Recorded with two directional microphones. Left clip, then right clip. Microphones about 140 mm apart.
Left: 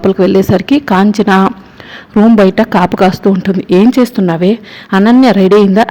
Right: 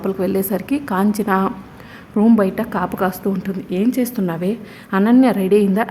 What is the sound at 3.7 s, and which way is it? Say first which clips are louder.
Speech: left 12 dB; 55° left (ahead or behind).